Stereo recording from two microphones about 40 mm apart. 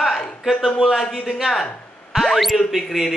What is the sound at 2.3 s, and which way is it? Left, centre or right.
Music, centre.